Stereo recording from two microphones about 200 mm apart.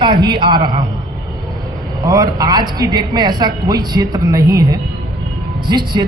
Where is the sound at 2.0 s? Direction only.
15° right (ahead or behind).